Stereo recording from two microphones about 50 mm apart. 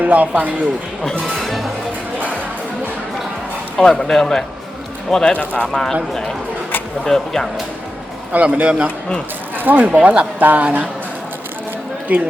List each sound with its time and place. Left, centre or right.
0.0 s a woman's voice: right
1.2 s speech: centre
3.8 s speech: centre
5.3 s speech: left
5.7 s speech: centre
8.3 s speech: right
9.6 s a woman's voice: right
12.1 s a woman's voice: right